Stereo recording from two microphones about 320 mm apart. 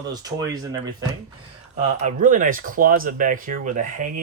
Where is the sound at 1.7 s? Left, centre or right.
Right.